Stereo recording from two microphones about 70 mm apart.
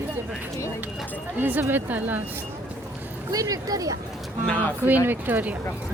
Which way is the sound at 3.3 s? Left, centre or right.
Right.